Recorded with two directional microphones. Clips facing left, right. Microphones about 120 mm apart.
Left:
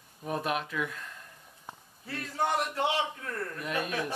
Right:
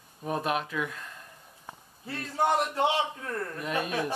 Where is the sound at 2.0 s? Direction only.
25° right (ahead or behind).